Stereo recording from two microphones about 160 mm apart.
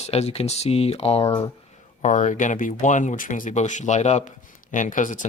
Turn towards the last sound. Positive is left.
turn(degrees=50)  # may be behind; listen again after turning